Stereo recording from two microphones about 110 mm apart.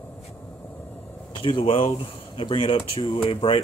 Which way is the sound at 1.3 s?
50° left (ahead or behind).